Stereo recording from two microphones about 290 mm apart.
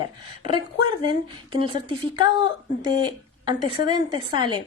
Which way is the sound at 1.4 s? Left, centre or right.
Centre.